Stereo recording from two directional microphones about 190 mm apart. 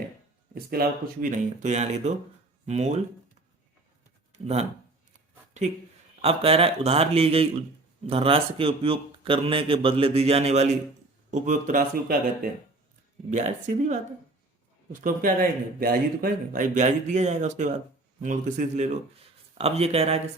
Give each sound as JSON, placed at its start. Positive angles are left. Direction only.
{"t": 0.5, "sound": "speech", "side_deg": -50}
{"t": 4.3, "sound": "a sound", "side_deg": -35}
{"t": 6.2, "sound": "a man's voice", "side_deg": -30}
{"t": 15.0, "sound": "a man's voice", "side_deg": -45}